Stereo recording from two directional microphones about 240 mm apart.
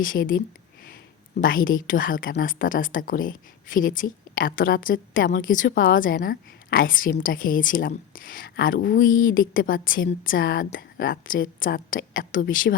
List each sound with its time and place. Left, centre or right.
0.0 s a woman's voice: left